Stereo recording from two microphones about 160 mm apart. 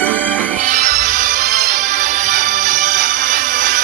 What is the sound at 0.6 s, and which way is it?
Music, 50° right (ahead or behind).